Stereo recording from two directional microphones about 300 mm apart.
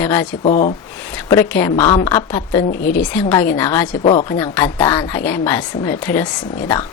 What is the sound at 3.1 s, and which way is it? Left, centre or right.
Speech, centre.